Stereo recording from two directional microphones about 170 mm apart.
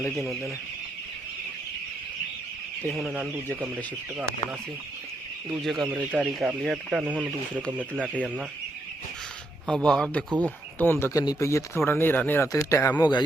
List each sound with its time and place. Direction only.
0.2 s speech: centre (ahead or behind)
3.0 s speech: centre (ahead or behind)
5.6 s speech: centre (ahead or behind)
9.6 s speech: 5° left (ahead or behind)
11.0 s speech: 20° left (ahead or behind)